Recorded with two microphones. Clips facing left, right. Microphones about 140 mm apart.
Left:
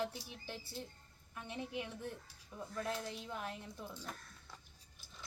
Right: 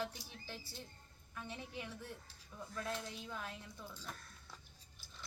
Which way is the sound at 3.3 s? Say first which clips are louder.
Left 3 dB; 20° left (ahead or behind).